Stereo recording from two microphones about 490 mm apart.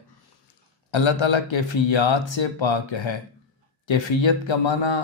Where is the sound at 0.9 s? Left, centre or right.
Left.